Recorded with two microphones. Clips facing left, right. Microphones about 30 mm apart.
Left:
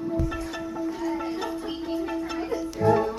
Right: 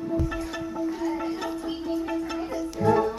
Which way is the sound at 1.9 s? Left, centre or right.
Left.